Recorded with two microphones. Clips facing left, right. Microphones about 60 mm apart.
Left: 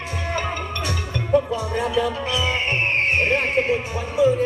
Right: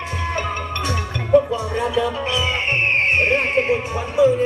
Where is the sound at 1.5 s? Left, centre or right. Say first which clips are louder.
Right 1 dB; right.